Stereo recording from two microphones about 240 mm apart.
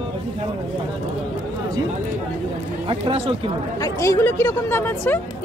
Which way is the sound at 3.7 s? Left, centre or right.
Centre.